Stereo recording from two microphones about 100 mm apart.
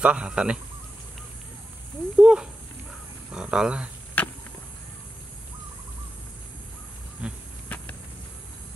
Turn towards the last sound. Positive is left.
turn(degrees=15)  # may be behind; listen again after turning